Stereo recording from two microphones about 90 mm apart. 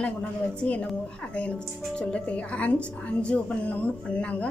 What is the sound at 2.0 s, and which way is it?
Speech, 10° left (ahead or behind).